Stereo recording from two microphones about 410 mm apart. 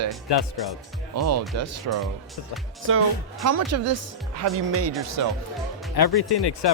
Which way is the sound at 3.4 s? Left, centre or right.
Right.